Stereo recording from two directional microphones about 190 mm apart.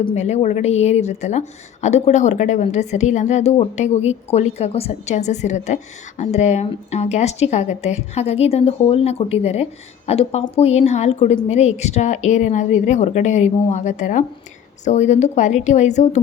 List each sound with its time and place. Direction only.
0.0 s a woman's voice: 35° left (ahead or behind)